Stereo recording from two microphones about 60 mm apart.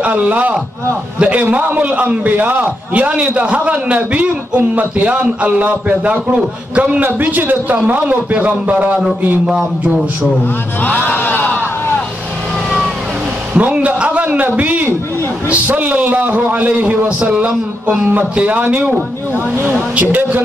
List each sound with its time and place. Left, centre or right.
0.0 s a man's voice: right
10.8 s speech: left
13.5 s a sound: right
15.5 s a man's voice: right
18.6 s a man's voice: right
20.0 s a man's voice: right